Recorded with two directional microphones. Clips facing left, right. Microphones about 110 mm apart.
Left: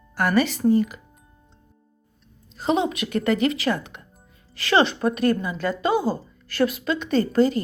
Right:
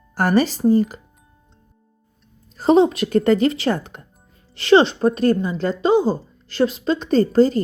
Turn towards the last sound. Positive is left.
turn(degrees=-35)  # may be behind; listen again after turning